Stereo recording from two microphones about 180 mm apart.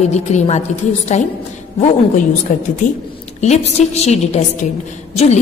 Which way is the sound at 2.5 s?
50° left (ahead or behind).